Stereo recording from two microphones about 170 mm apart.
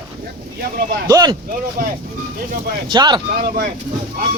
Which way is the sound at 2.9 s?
25° right (ahead or behind).